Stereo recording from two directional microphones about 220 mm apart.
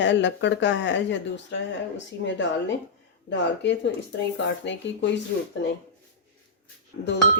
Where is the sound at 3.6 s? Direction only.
50° left (ahead or behind).